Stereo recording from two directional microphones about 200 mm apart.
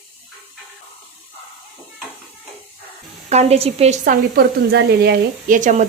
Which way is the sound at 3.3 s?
30° right (ahead or behind).